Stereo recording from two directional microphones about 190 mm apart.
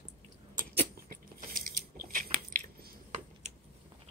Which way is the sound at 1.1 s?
45° right (ahead or behind).